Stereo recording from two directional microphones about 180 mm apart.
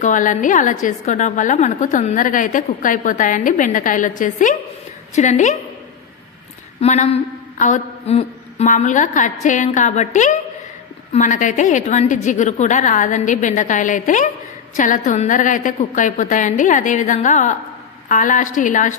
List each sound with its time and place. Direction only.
0.0 s a woman's voice: 45° left (ahead or behind)
6.8 s a woman's voice: 35° left (ahead or behind)